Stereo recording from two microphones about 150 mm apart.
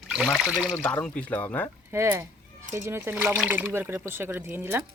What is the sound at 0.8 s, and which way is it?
Speech, 10° left (ahead or behind).